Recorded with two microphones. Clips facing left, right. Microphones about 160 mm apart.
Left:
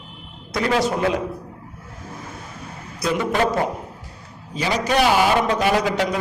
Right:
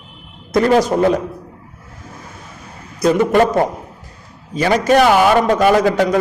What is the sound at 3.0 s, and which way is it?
Speech, 45° right (ahead or behind).